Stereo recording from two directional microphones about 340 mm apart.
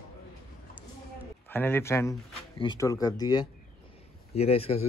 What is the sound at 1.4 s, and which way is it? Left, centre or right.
Speech, centre.